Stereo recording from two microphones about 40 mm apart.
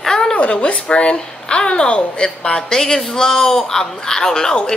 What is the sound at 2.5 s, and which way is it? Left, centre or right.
Speech, centre.